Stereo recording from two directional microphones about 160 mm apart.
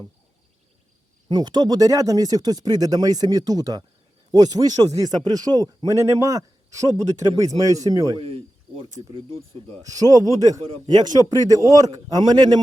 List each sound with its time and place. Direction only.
1.3 s a man's voice: 25° right (ahead or behind)
8.2 s speech: 35° right (ahead or behind)
9.8 s a man's voice: 20° right (ahead or behind)